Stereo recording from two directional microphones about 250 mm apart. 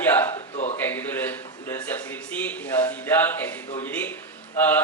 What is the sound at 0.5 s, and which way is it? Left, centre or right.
Speech, left.